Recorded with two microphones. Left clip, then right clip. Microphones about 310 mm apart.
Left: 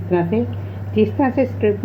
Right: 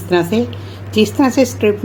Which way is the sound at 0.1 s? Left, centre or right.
Right.